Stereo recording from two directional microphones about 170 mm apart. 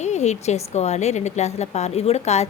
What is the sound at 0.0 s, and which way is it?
A woman's voice, 40° left (ahead or behind).